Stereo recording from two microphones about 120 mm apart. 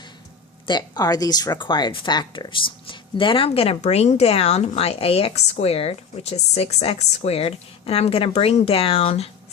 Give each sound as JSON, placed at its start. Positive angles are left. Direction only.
{"t": 0.7, "sound": "speech", "side_deg": 35}